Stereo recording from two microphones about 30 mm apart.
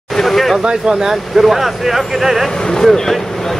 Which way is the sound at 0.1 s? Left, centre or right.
Centre.